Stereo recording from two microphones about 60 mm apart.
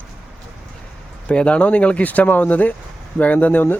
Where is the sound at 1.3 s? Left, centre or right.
Centre.